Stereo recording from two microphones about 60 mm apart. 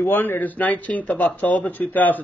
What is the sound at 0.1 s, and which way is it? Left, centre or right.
Speech, left.